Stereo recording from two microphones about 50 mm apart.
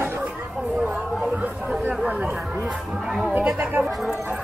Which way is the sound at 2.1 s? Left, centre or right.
Right.